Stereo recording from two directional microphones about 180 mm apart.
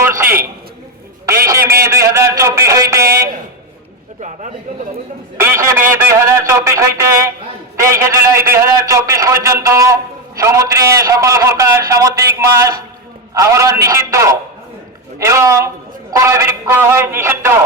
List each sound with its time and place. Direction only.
0.0 s a sound: 15° right (ahead or behind)
4.2 s a man's voice: 40° right (ahead or behind)
5.4 s a man's voice: 15° right (ahead or behind)